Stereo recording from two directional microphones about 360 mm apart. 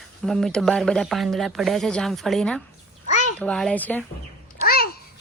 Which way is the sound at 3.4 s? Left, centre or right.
Centre.